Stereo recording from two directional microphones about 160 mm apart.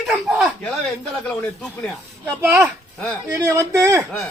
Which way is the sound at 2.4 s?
15° right (ahead or behind).